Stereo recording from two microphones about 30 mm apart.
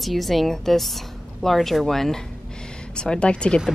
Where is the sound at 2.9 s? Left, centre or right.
Left.